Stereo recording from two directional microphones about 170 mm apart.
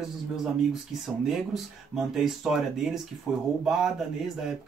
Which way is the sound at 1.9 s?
Centre (ahead or behind).